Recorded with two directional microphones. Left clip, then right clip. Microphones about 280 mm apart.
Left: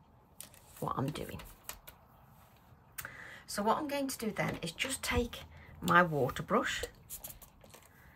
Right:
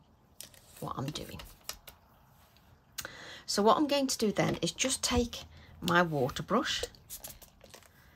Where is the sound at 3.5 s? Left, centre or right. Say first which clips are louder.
Right 7 dB; centre.